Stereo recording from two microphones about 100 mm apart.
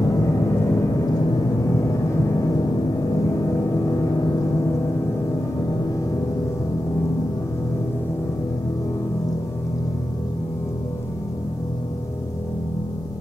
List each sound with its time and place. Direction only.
0.1 s gong: 35° left (ahead or behind)
1.8 s a sound: 30° left (ahead or behind)
3.8 s vehicle: 35° left (ahead or behind)